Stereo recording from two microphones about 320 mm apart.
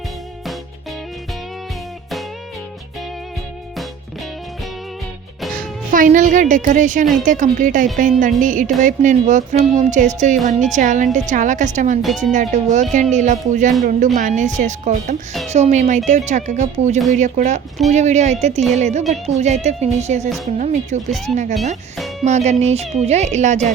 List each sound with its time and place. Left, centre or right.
5.5 s a woman's voice: right
12.0 s speech: centre
12.3 s speech: right
22.2 s speech: right